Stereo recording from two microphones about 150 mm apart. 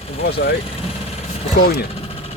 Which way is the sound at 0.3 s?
90° left.